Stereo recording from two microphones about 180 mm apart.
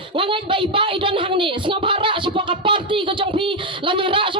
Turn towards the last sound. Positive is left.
turn(degrees=-30)  # may be behind; listen again after turning